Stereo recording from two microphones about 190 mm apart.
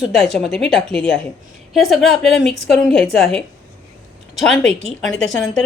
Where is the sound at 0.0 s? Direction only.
Centre (ahead or behind).